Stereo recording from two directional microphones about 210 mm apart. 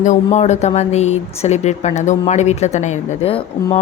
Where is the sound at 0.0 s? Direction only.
35° left (ahead or behind).